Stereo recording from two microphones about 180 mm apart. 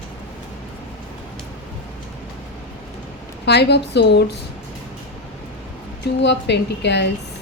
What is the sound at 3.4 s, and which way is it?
Speech, 70° left (ahead or behind).